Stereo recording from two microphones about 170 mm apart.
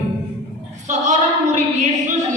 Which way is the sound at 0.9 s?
45° right (ahead or behind).